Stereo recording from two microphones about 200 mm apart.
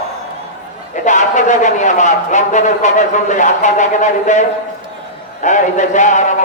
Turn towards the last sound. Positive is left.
turn(degrees=35)  # may be behind; listen again after turning